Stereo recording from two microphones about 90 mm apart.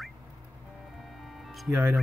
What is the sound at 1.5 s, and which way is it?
Music, centre (ahead or behind).